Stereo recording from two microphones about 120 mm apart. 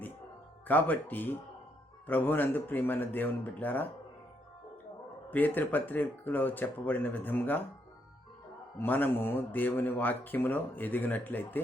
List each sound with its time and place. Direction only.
0.7 s a man's voice: 15° left (ahead or behind)
5.3 s a man's voice: 15° left (ahead or behind)
8.8 s a man's voice: 15° left (ahead or behind)